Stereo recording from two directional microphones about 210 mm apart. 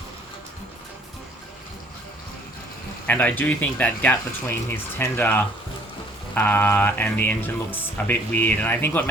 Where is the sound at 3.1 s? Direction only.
10° left (ahead or behind).